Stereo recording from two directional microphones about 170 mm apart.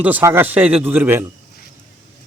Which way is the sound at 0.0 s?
10° right (ahead or behind).